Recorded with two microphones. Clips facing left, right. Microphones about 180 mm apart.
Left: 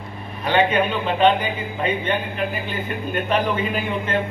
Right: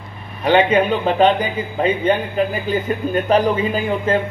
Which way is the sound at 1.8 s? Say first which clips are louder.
Right 6 dB; 35° right (ahead or behind).